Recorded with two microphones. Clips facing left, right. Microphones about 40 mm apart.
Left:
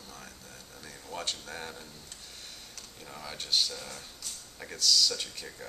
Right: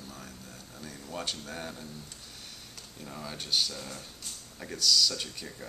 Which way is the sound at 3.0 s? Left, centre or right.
Centre.